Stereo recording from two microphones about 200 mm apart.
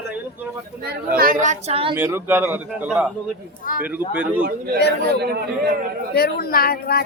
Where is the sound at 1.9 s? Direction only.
10° right (ahead or behind).